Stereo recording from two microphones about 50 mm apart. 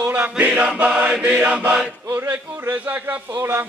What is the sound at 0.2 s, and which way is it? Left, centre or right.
Chant, right.